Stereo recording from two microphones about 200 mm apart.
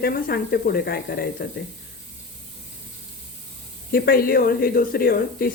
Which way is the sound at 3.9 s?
45° left (ahead or behind).